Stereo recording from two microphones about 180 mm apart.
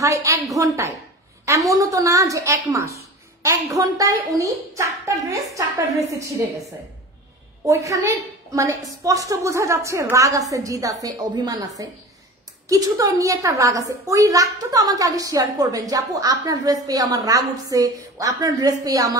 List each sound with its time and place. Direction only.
0.0 s a woman's voice: 15° right (ahead or behind)
7.6 s a woman's voice: 15° right (ahead or behind)